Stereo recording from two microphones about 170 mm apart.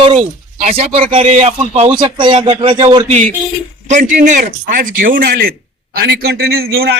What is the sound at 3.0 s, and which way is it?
Speech, 45° right (ahead or behind).